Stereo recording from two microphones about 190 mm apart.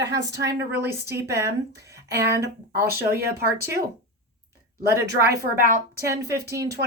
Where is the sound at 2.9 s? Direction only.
55° right (ahead or behind).